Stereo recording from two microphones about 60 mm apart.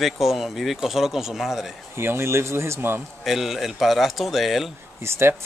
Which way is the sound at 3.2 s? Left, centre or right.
Centre.